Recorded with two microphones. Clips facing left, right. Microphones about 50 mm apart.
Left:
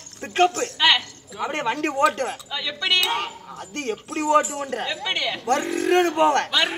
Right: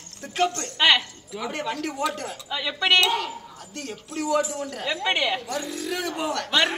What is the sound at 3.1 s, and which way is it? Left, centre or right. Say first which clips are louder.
Speech: even; left.